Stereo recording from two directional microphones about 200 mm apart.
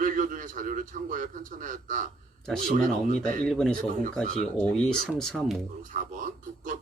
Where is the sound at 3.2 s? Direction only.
45° right (ahead or behind).